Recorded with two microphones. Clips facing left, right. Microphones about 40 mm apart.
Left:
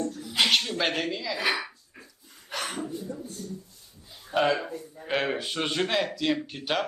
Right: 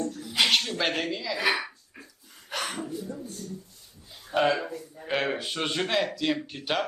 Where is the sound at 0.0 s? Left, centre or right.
Right.